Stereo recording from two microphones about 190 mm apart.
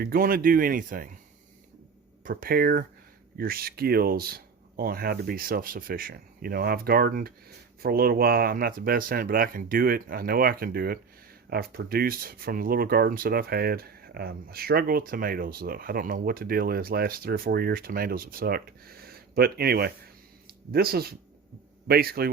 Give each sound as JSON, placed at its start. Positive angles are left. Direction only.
{"t": 0.0, "sound": "speech", "side_deg": -50}
{"t": 2.2, "sound": "speech", "side_deg": -50}